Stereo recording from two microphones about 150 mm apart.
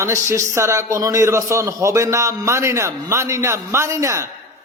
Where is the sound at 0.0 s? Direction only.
20° right (ahead or behind).